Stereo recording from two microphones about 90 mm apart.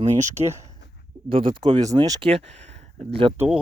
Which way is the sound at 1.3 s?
80° right.